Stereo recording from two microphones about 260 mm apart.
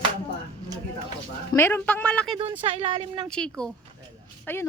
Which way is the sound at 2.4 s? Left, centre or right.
Right.